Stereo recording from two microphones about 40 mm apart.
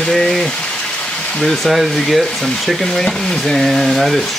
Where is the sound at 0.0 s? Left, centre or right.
Centre.